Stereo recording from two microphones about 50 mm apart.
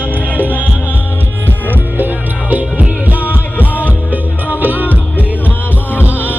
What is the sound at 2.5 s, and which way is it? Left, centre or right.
Music, right.